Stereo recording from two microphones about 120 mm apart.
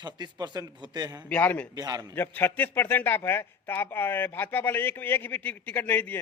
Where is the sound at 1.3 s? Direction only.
15° left (ahead or behind).